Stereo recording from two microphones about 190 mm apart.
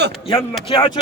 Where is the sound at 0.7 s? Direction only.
25° left (ahead or behind).